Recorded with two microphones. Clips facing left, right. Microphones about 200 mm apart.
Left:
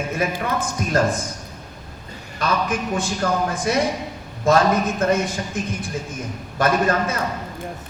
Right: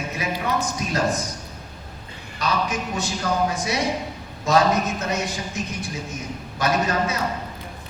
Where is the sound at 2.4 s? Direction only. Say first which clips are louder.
Left 2 dB; 50° left (ahead or behind).